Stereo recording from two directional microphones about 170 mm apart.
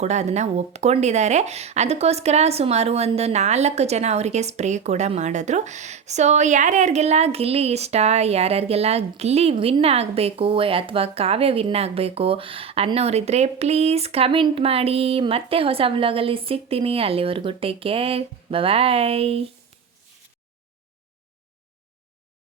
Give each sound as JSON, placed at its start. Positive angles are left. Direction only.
{"t": 0.0, "sound": "speech", "side_deg": -40}